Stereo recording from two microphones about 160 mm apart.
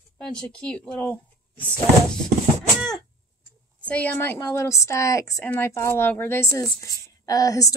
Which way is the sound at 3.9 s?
10° left (ahead or behind).